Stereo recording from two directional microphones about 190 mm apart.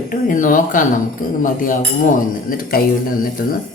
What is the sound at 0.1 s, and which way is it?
Speech, 45° left (ahead or behind).